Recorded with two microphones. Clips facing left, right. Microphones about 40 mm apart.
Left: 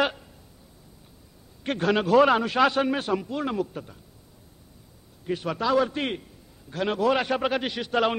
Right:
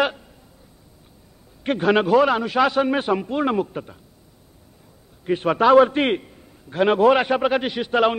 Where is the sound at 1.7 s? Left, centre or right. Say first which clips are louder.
Right 5 dB; centre.